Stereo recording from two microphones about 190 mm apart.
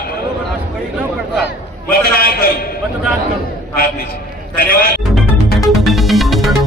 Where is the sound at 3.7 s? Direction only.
50° left (ahead or behind).